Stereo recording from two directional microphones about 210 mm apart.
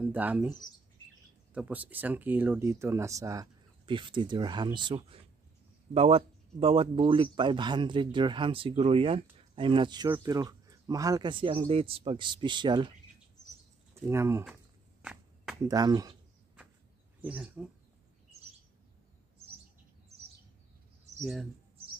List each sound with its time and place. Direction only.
0.0 s speech: 5° right (ahead or behind)
14.0 s speech: 10° right (ahead or behind)
14.4 s insect: 5° right (ahead or behind)
15.7 s speech: 15° right (ahead or behind)
17.2 s speech: 5° right (ahead or behind)
21.2 s speech: centre (ahead or behind)